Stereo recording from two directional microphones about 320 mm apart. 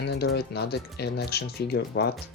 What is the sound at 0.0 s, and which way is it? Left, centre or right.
Speech, left.